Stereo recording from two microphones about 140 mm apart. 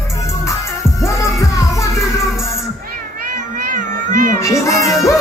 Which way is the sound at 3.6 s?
80° right.